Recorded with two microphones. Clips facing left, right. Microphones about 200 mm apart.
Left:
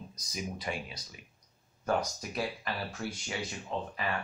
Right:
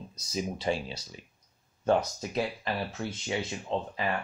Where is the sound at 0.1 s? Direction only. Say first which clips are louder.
Right 7 dB; 25° right (ahead or behind).